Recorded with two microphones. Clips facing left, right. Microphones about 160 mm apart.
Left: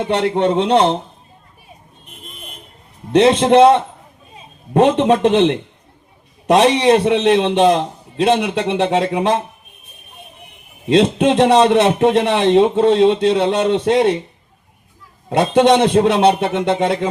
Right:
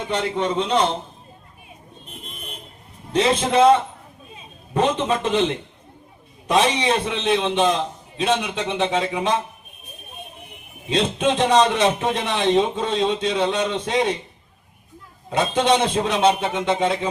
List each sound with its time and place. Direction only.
0.0 s a man's voice: 70° left (ahead or behind)
3.1 s a man's voice: 70° left (ahead or behind)
10.8 s a man's voice: 70° left (ahead or behind)
15.3 s a man's voice: 70° left (ahead or behind)